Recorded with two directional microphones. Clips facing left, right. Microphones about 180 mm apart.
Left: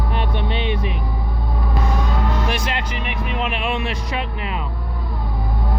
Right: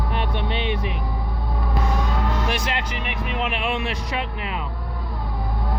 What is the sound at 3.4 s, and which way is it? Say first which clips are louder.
Speech: left 1 dB; 35° left (ahead or behind).